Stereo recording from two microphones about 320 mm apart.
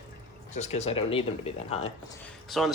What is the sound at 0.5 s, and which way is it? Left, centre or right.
Speech, left.